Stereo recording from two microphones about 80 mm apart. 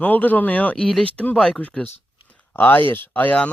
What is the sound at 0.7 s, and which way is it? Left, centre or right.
Speech, centre.